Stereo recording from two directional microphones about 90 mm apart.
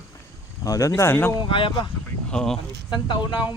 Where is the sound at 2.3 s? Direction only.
5° left (ahead or behind).